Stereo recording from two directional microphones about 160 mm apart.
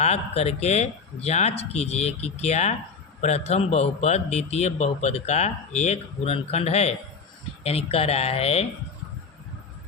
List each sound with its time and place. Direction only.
0.0 s a man's voice: 40° left (ahead or behind)